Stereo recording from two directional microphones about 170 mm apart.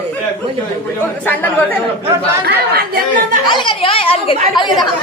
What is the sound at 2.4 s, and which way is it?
Speech, 65° right (ahead or behind).